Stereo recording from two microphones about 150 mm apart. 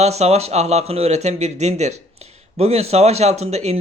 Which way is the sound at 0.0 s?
45° right (ahead or behind).